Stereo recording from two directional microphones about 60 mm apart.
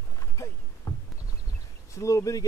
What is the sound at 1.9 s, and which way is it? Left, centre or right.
Speech, left.